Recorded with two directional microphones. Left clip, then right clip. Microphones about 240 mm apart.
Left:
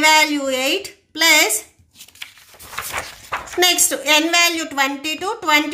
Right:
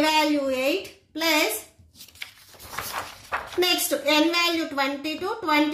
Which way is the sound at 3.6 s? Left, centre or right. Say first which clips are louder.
Left 7 dB; left.